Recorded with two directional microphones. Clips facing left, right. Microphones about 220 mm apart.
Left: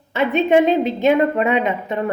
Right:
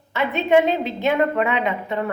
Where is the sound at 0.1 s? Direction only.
20° left (ahead or behind).